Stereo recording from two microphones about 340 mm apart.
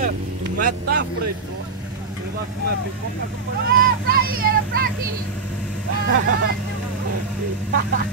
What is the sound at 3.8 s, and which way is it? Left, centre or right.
Vehicle, right.